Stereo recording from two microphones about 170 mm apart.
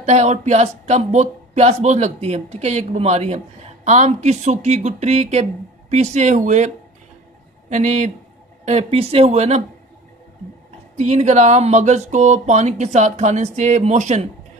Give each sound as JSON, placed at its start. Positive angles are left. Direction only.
{"t": 0.0, "sound": "speech", "side_deg": -40}
{"t": 7.7, "sound": "speech", "side_deg": -45}
{"t": 11.0, "sound": "speech", "side_deg": -45}